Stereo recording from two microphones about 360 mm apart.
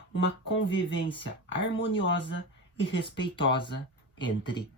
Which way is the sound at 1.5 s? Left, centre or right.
Left.